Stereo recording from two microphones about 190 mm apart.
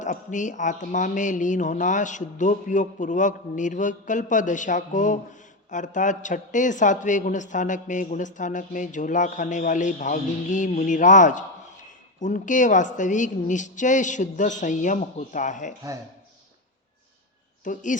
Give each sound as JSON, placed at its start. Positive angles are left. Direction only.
{"t": 0.0, "sound": "a man's voice", "side_deg": 40}
{"t": 17.6, "sound": "speech", "side_deg": 40}